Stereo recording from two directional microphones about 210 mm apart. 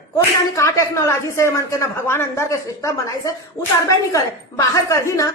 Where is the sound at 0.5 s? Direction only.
15° left (ahead or behind).